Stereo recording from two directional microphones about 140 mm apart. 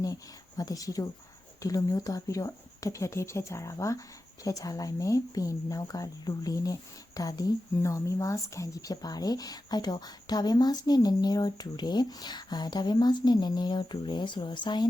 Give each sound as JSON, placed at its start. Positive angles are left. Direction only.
{"t": 0.0, "sound": "speech", "side_deg": 25}